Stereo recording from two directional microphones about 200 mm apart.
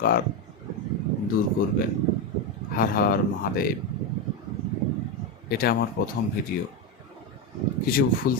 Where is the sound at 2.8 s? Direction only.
45° left (ahead or behind).